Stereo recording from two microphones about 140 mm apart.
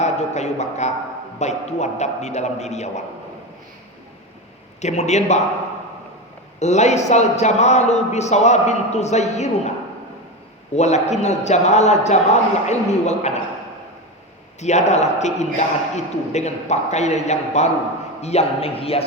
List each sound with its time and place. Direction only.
0.0 s a man's voice: 55° left (ahead or behind)
4.8 s a man's voice: 55° left (ahead or behind)
6.6 s a man's voice: 55° left (ahead or behind)
14.6 s a man's voice: 55° left (ahead or behind)